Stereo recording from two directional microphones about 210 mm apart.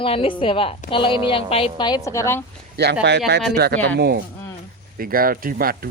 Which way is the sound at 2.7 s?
55° right (ahead or behind).